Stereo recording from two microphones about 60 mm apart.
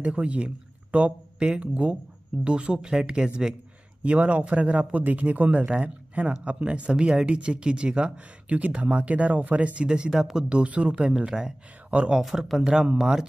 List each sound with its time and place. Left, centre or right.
0.0 s speech: centre
12.2 s speech: centre